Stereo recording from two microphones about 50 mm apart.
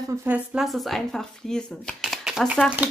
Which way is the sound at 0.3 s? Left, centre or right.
Right.